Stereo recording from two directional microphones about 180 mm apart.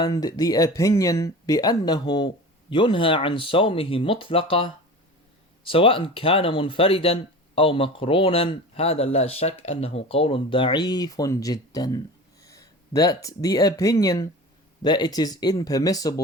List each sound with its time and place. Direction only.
0.0 s speech: 20° left (ahead or behind)